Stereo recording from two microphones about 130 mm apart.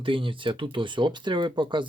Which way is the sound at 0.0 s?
40° right (ahead or behind).